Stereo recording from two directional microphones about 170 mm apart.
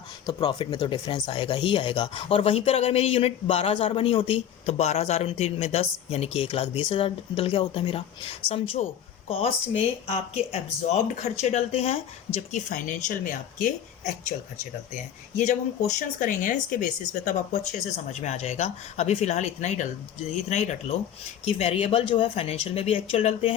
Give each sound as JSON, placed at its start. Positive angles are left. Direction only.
{"t": 0.3, "sound": "speech", "side_deg": 25}
{"t": 15.4, "sound": "speech", "side_deg": 45}